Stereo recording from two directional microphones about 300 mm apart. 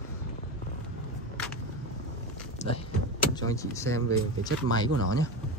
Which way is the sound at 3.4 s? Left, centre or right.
Centre.